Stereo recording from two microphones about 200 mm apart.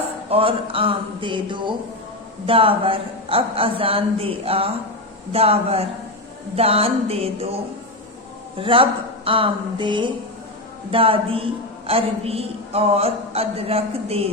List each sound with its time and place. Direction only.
0.3 s a woman's voice: 25° right (ahead or behind)
8.5 s a woman's voice: 25° right (ahead or behind)